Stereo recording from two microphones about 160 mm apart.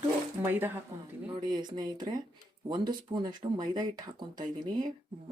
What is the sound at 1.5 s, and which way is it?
Speech, 25° right (ahead or behind).